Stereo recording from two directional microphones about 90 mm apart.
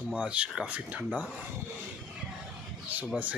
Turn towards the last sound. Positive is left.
turn(degrees=-20)  # may be behind; listen again after turning